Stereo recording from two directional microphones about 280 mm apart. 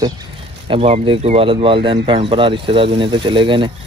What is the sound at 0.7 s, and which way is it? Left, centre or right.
Speech, right.